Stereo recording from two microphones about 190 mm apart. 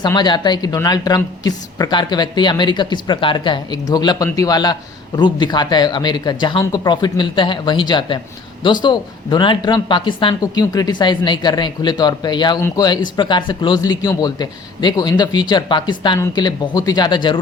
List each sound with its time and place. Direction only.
0.0 s a man's voice: 20° left (ahead or behind)